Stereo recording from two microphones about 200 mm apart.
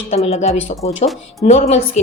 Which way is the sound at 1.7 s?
30° left (ahead or behind).